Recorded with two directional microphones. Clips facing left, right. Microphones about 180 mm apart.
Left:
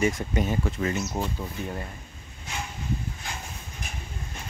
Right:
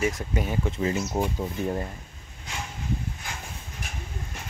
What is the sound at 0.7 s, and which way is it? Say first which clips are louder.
Speech: right 1 dB; 25° right (ahead or behind).